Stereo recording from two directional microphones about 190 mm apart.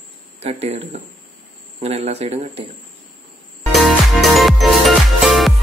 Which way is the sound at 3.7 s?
Centre (ahead or behind).